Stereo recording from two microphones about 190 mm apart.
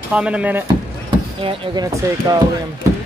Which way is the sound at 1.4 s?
25° right (ahead or behind).